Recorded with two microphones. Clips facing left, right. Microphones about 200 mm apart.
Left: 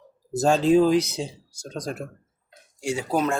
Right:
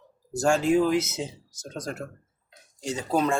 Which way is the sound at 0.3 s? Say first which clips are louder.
Left 2 dB; 20° left (ahead or behind).